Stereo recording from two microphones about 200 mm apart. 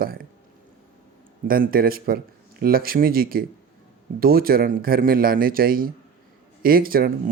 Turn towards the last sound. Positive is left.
turn(degrees=-50)  # may be behind; listen again after turning